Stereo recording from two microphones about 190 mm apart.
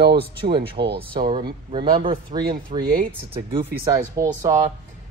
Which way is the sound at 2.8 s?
50° right (ahead or behind).